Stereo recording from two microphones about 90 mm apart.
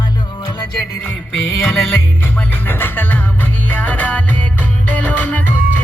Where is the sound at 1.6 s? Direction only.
25° left (ahead or behind).